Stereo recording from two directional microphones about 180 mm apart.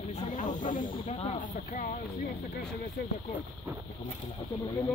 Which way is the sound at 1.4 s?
45° left (ahead or behind).